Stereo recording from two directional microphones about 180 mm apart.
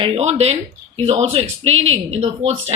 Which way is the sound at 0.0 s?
35° right (ahead or behind).